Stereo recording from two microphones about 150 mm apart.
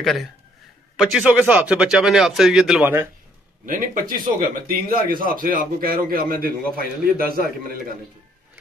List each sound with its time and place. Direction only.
0.0 s speech: centre (ahead or behind)
3.6 s a man's voice: 65° right (ahead or behind); by 7.8 s 90° right